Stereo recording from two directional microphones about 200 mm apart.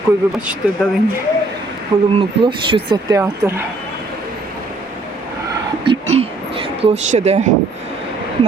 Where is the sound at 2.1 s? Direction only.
25° right (ahead or behind).